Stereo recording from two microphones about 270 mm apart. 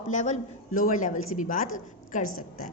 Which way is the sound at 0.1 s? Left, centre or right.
Left.